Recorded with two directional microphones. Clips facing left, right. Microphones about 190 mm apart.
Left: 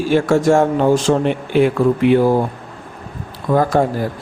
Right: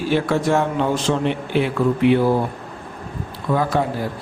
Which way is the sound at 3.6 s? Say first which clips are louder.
Left 5 dB; 45° left (ahead or behind).